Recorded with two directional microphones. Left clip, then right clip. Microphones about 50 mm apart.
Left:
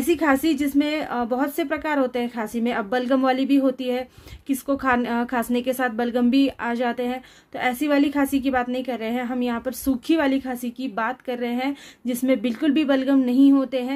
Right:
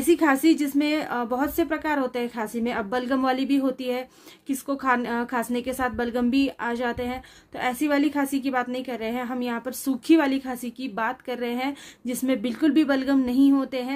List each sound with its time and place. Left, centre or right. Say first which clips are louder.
0.0 s a woman's voice: even; left; by 10.5 s centre
10.5 s a woman's voice: left 3 dB; left
11.0 s speech: left 2 dB; centre
13.7 s speech: left 4 dB; left